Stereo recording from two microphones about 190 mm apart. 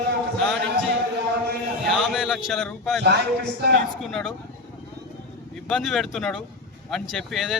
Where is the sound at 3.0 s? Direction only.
60° right (ahead or behind).